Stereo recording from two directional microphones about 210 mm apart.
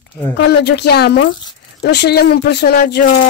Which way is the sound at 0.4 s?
50° left (ahead or behind).